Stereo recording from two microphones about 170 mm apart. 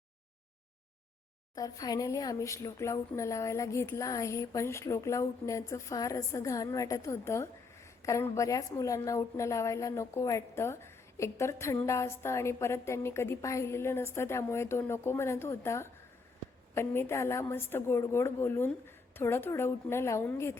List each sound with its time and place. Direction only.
1.5 s speech: 20° left (ahead or behind)